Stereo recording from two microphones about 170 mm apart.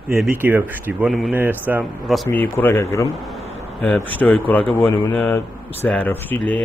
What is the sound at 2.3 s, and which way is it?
Speech, 10° left (ahead or behind).